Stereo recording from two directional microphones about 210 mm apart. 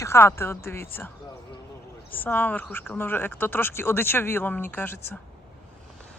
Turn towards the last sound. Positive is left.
turn(degrees=10)  # may be behind; listen again after turning